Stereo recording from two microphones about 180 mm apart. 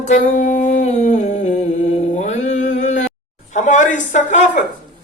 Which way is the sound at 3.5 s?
40° left (ahead or behind).